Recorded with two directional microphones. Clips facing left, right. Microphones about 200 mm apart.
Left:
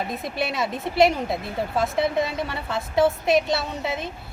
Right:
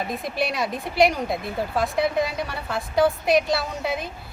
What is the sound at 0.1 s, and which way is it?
A woman's voice, centre (ahead or behind).